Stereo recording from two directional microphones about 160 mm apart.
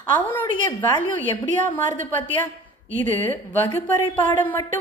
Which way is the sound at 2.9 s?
55° right (ahead or behind).